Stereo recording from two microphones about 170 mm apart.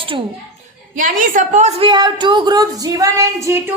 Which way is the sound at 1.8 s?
25° right (ahead or behind).